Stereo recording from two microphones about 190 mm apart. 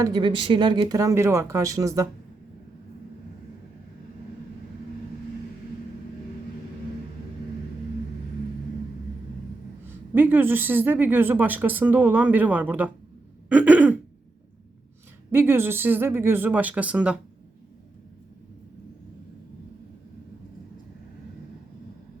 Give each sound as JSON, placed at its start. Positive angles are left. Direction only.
{"t": 0.0, "sound": "speech", "side_deg": -25}
{"t": 10.2, "sound": "speech", "side_deg": -10}
{"t": 13.5, "sound": "throat clearing", "side_deg": -10}
{"t": 15.3, "sound": "speech", "side_deg": -10}